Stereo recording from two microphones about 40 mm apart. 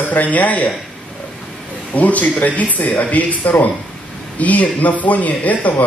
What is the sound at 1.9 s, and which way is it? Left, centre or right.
A man's voice, left.